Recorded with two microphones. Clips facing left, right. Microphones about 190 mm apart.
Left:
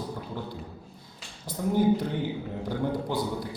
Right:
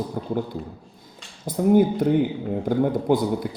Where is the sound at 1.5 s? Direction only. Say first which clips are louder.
Right 6 dB; 50° right (ahead or behind).